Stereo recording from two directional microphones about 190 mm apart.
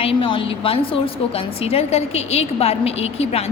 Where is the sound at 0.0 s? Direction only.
30° left (ahead or behind).